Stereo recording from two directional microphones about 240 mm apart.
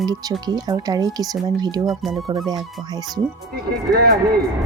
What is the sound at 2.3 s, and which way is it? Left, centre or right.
Speech, centre.